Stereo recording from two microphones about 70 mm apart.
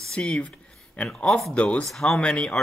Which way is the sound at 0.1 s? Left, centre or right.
Centre.